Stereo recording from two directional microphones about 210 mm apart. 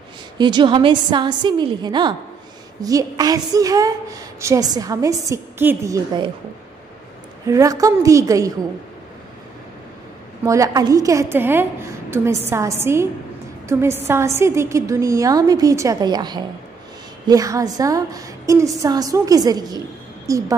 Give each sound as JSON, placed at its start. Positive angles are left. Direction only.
{"t": 0.4, "sound": "a woman's voice", "side_deg": -20}
{"t": 7.4, "sound": "a woman's voice", "side_deg": -15}
{"t": 10.4, "sound": "a woman's voice", "side_deg": -15}